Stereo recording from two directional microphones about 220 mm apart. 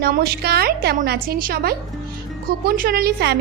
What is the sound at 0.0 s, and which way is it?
A woman's voice, 45° right (ahead or behind).